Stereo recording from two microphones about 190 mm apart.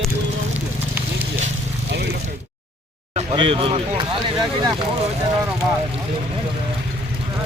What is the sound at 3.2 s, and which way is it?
Speech, 30° right (ahead or behind).